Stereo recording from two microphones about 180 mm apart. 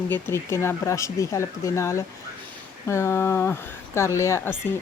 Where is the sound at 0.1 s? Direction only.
15° left (ahead or behind).